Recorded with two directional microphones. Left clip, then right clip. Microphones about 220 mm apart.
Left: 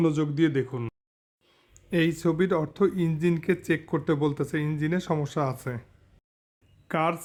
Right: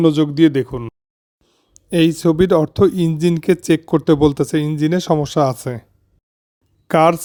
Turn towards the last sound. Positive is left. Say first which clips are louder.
# right 14 dB
turn(degrees=-45)  # may be behind; listen again after turning